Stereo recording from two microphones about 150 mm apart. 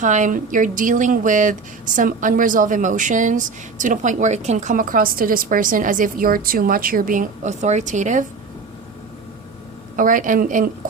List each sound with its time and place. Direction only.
0.0 s speech: 55° right (ahead or behind)
9.9 s speech: 60° right (ahead or behind)